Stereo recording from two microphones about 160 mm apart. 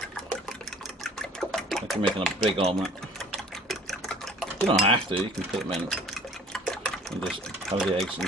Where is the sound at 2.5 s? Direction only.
40° right (ahead or behind).